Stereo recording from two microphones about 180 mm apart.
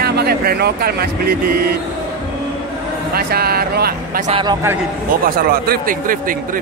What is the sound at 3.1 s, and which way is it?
Speech, 60° right (ahead or behind).